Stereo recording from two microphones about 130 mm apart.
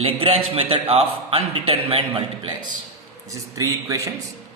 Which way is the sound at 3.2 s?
25° right (ahead or behind).